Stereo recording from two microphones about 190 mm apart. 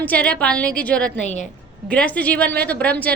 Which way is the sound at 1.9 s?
10° left (ahead or behind).